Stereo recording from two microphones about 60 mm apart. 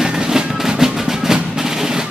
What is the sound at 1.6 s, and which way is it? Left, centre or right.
Percussion, centre.